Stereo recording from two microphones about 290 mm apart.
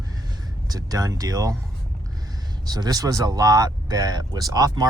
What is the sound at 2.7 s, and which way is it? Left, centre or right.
Speech, centre.